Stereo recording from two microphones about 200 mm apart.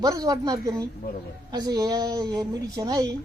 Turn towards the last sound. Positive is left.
turn(degrees=-20)  # may be behind; listen again after turning